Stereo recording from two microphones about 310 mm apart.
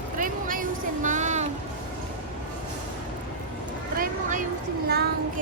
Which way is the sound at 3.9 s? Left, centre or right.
Right.